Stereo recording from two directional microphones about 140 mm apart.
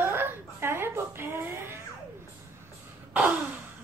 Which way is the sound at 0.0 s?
15° right (ahead or behind).